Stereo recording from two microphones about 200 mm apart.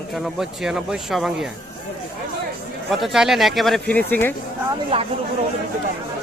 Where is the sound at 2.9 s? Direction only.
Centre (ahead or behind).